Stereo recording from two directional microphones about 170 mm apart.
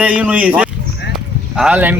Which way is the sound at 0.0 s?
5° right (ahead or behind).